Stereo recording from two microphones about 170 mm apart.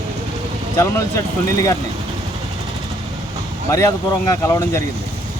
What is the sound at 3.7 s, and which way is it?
Speech, 20° left (ahead or behind).